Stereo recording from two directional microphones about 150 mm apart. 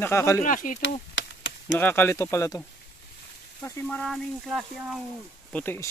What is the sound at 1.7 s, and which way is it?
Speech, 15° left (ahead or behind).